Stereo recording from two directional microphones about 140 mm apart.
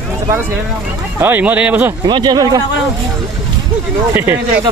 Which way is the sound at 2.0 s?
30° right (ahead or behind).